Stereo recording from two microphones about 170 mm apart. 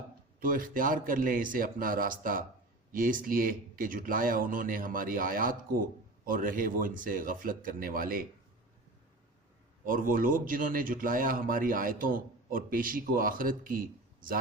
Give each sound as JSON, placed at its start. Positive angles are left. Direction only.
{"t": 0.3, "sound": "speech", "side_deg": -55}
{"t": 9.8, "sound": "speech", "side_deg": -55}